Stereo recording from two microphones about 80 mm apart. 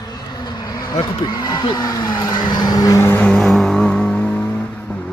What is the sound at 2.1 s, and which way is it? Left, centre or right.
Speech, left.